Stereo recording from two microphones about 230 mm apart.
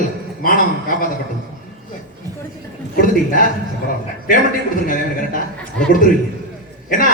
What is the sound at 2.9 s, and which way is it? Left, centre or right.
Speech, left.